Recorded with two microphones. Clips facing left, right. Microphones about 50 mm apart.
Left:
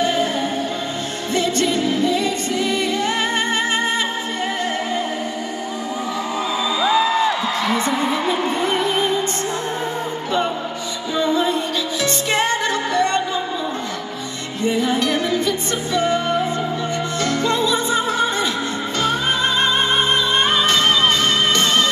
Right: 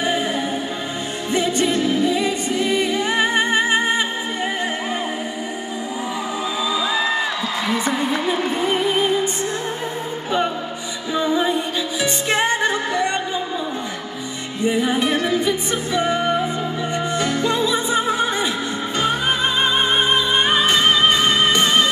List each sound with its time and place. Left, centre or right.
0.0 s music: centre
1.3 s music: centre
7.7 s music: centre
11.1 s music: centre
14.6 s music: centre